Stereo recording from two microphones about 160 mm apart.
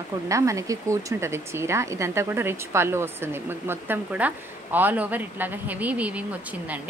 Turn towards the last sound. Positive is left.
turn(degrees=-10)  # may be behind; listen again after turning